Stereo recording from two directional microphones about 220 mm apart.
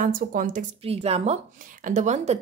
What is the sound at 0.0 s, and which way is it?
Speech, 35° right (ahead or behind).